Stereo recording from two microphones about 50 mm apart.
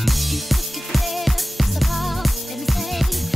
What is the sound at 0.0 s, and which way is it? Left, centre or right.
Music, centre.